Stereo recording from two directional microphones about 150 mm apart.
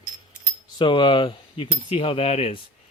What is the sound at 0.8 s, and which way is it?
A man's voice, 30° left (ahead or behind).